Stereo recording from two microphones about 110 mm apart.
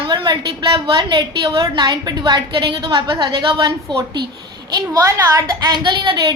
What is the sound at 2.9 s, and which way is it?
Speech, 35° right (ahead or behind).